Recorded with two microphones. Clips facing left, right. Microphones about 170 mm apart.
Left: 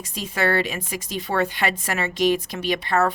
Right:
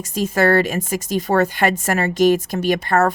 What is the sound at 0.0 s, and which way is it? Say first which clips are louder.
Speech: right 7 dB; 45° right (ahead or behind).